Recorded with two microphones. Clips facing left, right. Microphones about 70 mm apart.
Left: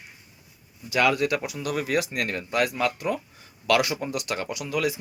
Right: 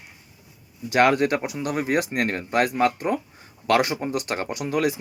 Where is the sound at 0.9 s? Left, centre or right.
Right.